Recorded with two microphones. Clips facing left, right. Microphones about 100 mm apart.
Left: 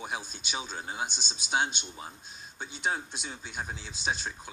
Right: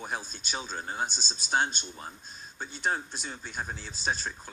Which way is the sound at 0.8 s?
10° left (ahead or behind).